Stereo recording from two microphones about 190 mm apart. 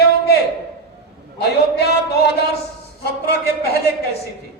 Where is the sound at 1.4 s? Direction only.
55° left (ahead or behind).